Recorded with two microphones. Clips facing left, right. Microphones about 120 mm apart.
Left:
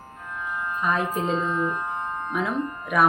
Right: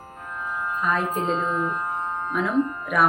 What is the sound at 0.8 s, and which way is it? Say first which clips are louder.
Music: even; centre (ahead or behind).